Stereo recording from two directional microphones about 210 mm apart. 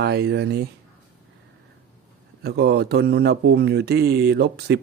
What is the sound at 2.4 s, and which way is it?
Speech, 50° right (ahead or behind).